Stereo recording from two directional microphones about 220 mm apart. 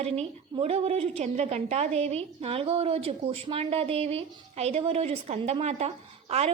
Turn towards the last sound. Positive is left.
turn(degrees=-30)  # may be behind; listen again after turning